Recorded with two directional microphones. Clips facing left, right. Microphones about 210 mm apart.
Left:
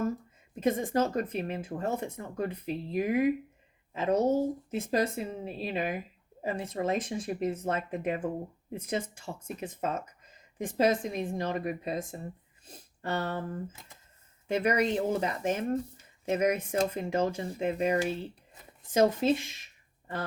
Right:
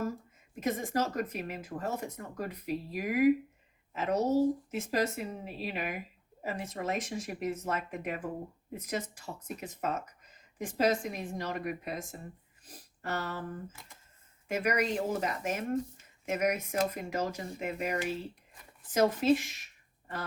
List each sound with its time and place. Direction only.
0.6 s speech: 30° left (ahead or behind)